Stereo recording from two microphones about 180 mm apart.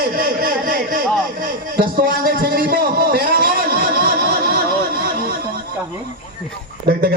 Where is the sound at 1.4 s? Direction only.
55° right (ahead or behind).